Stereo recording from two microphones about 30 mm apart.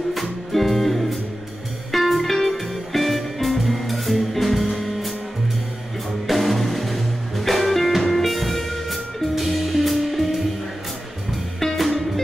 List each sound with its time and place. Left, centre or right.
0.1 s music: centre
6.2 s music: centre
11.6 s music: centre